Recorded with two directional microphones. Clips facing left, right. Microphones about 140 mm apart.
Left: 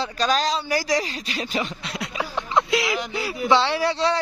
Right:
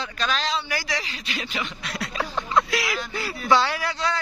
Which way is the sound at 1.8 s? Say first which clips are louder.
Even; 20° left (ahead or behind).